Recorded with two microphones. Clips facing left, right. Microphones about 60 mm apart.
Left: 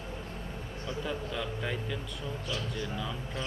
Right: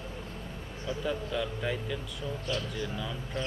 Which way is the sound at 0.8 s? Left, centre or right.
Centre.